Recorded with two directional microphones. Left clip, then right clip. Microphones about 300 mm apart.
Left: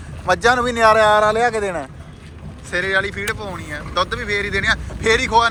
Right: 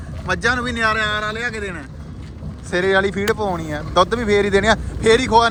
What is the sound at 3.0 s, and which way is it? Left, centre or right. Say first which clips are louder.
Speech: right 3 dB; centre.